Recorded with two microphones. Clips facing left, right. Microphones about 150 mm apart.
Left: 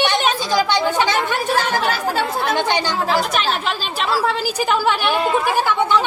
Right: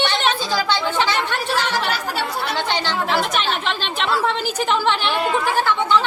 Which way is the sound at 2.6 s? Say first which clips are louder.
Left 3 dB; 15° left (ahead or behind).